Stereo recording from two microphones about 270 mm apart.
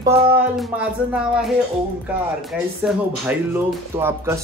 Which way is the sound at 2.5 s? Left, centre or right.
Centre.